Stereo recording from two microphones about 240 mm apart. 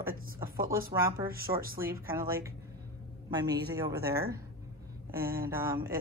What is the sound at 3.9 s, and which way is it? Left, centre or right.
Speech, right.